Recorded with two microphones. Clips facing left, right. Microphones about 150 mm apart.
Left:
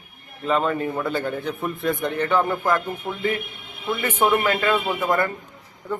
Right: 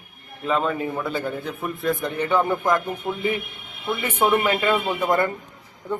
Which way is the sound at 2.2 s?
15° right (ahead or behind).